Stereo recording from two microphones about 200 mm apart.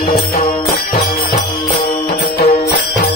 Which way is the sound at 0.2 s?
50° left (ahead or behind).